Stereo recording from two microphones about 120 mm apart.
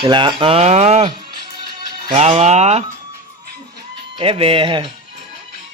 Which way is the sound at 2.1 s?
65° right (ahead or behind).